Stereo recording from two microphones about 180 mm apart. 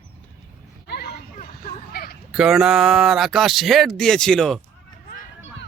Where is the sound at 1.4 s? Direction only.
50° left (ahead or behind).